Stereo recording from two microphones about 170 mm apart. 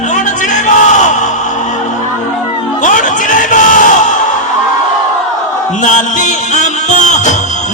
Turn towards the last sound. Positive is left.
turn(degrees=45)  # may be behind; listen again after turning